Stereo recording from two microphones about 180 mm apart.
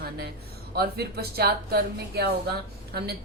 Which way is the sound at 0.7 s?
60° right (ahead or behind).